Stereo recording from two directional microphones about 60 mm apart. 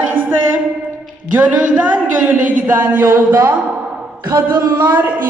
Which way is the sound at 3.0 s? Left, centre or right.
Right.